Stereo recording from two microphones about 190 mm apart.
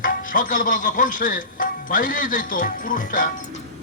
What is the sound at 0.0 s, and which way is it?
Speech, 45° left (ahead or behind).